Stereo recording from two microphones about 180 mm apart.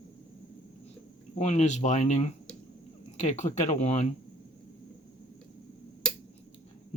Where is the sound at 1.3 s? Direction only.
40° left (ahead or behind).